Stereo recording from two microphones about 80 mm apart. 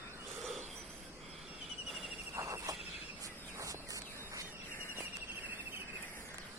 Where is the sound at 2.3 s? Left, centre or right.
Right.